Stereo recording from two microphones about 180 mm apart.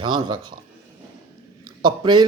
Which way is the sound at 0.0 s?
25° right (ahead or behind).